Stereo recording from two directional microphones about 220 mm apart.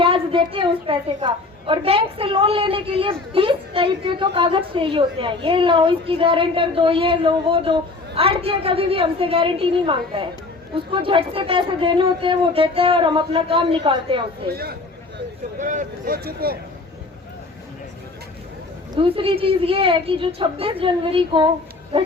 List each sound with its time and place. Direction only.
0.0 s a woman's voice: 25° right (ahead or behind)
14.4 s speech: 45° right (ahead or behind)
18.9 s a woman's voice: 25° right (ahead or behind)